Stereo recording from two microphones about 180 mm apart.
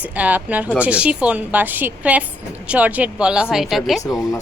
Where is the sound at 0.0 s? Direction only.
10° right (ahead or behind).